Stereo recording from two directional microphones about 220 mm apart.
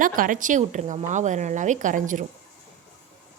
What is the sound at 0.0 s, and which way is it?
A woman's voice, 40° right (ahead or behind).